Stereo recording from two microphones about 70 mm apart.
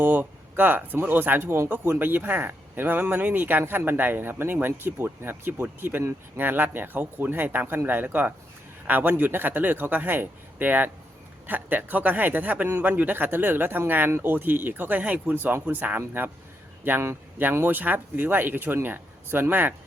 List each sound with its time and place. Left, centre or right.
0.0 s speech: right